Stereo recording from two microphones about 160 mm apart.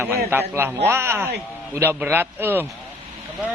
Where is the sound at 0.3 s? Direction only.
15° right (ahead or behind).